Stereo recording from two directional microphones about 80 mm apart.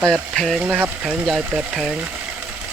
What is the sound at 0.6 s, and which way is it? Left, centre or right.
Speech, right.